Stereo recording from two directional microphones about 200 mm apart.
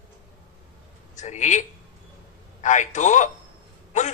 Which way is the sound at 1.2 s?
35° left (ahead or behind).